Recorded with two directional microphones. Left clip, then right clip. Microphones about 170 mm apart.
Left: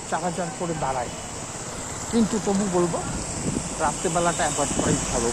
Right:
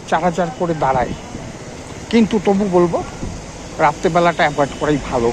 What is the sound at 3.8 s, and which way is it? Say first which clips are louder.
Speech: right 10 dB; 15° right (ahead or behind).